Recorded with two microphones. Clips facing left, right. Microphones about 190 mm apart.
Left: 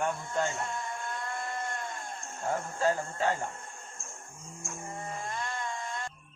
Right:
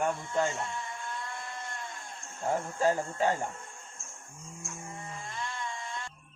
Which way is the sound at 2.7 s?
15° right (ahead or behind).